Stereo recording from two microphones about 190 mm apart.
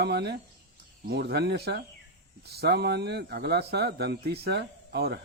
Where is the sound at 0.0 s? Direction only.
60° right (ahead or behind).